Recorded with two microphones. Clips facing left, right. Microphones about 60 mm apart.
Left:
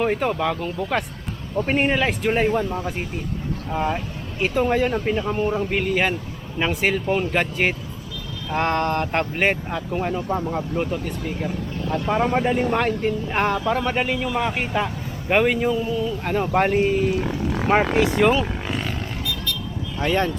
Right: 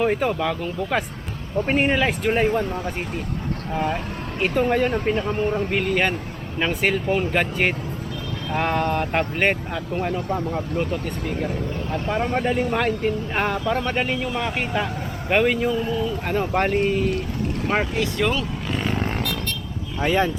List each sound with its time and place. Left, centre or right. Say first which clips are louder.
0.0 s speech: even; centre
17.9 s speech: left 5 dB; left
19.2 s vehicle: right 1 dB; right
20.0 s speech: right 1 dB; centre